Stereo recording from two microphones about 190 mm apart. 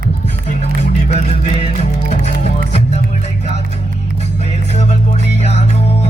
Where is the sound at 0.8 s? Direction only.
35° left (ahead or behind).